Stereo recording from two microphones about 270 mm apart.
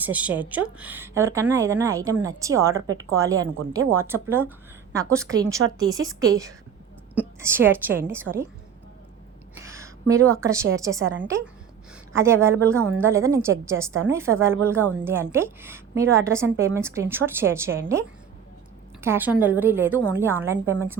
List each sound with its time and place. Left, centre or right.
0.0 s a woman's voice: centre
6.0 s a woman's voice: right
7.2 s a woman's voice: centre
9.6 s a sound: centre
10.4 s a woman's voice: centre
19.0 s a woman's voice: centre